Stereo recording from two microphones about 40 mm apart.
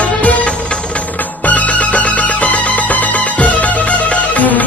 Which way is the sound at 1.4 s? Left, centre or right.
Left.